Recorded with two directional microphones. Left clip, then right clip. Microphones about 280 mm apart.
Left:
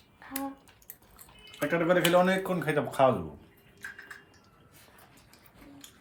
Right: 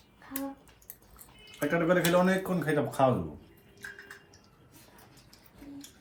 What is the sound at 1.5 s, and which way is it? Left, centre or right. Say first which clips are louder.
Speech: left 1 dB; left.